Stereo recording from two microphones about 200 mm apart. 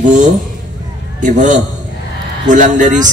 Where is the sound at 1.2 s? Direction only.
40° right (ahead or behind).